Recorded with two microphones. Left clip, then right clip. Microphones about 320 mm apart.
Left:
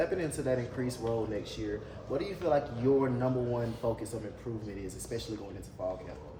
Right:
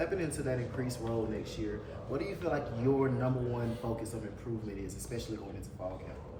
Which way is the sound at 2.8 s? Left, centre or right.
Left.